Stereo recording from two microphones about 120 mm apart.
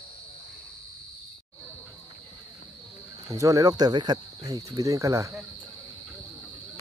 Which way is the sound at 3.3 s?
30° right (ahead or behind).